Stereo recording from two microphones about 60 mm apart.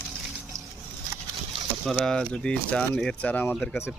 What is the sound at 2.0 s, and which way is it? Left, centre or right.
Speech, centre.